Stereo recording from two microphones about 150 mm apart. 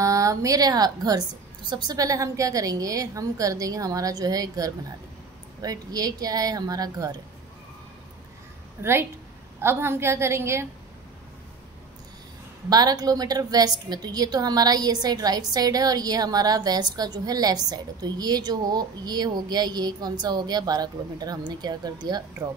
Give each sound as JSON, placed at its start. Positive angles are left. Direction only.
{"t": 0.0, "sound": "a woman's voice", "side_deg": -20}
{"t": 8.8, "sound": "a woman's voice", "side_deg": -15}
{"t": 12.6, "sound": "a woman's voice", "side_deg": -25}